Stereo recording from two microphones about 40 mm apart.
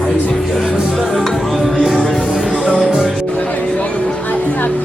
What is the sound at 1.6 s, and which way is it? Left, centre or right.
Music, centre.